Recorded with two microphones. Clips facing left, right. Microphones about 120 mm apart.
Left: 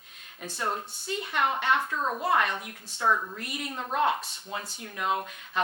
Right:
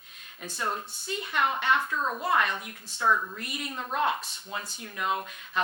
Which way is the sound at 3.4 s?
55° left (ahead or behind).